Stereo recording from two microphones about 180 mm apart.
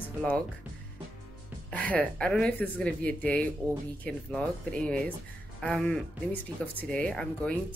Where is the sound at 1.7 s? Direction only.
10° left (ahead or behind).